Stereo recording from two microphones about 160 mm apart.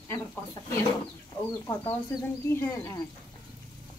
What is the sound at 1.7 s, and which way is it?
Speech, 15° left (ahead or behind).